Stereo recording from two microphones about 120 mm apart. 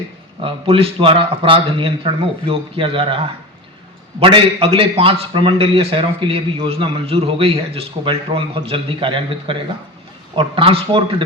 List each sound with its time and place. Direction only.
0.4 s a man's voice: 50° right (ahead or behind)
4.2 s a man's voice: 50° right (ahead or behind)